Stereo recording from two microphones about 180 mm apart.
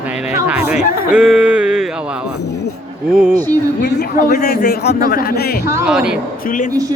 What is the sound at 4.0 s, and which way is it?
A man's voice, 50° left (ahead or behind).